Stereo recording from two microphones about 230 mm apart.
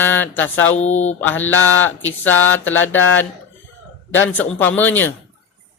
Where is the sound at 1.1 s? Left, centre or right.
Centre.